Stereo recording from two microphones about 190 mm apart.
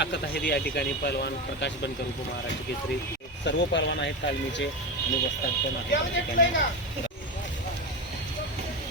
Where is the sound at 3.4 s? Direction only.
70° left (ahead or behind).